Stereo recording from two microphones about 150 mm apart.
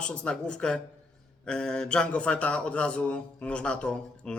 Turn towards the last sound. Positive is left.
turn(degrees=5)  # may be behind; listen again after turning